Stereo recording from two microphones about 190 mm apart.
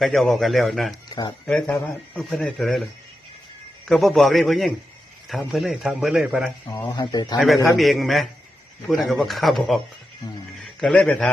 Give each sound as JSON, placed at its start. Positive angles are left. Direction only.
{"t": 0.0, "sound": "speech", "side_deg": 0}
{"t": 3.8, "sound": "speech", "side_deg": 0}
{"t": 6.7, "sound": "speech", "side_deg": 20}
{"t": 7.3, "sound": "a man's voice", "side_deg": 0}